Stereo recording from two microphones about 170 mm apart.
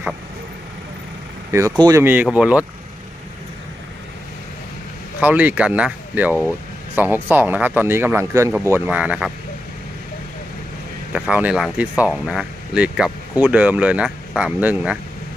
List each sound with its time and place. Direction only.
1.5 s speech: 15° right (ahead or behind)
5.2 s speech: 10° right (ahead or behind)
11.1 s speech: 10° right (ahead or behind)